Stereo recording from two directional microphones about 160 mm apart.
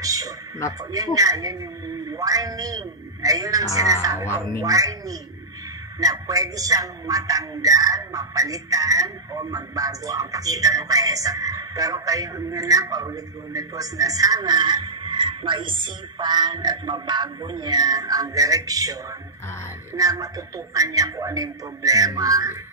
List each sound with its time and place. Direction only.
0.0 s radio: 20° right (ahead or behind)
0.9 s a man's voice: 20° right (ahead or behind)
20.0 s a man's voice: 20° right (ahead or behind)